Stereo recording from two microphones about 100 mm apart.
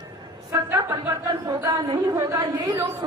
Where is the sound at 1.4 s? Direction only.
45° right (ahead or behind).